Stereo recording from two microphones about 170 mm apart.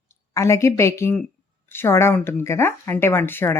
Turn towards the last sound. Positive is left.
turn(degrees=15)  # may be behind; listen again after turning